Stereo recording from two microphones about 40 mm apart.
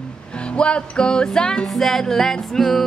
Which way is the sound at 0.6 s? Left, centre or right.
Left.